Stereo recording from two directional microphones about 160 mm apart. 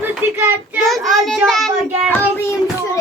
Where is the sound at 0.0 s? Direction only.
10° right (ahead or behind).